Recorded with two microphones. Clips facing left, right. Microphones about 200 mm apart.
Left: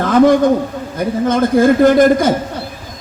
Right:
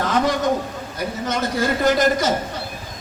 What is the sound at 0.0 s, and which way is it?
A man's voice, 55° left (ahead or behind).